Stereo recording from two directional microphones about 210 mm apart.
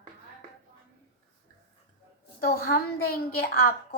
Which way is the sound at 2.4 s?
45° left (ahead or behind).